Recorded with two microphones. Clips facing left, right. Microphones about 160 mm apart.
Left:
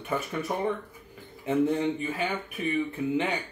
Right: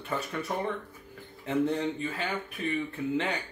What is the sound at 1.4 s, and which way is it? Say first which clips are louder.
Speech: left 3 dB; 15° left (ahead or behind).